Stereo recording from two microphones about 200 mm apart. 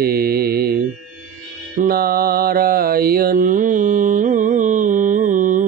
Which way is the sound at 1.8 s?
45° right (ahead or behind).